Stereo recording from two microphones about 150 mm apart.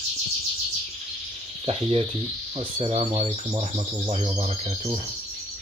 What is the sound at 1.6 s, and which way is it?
Speech, 40° right (ahead or behind).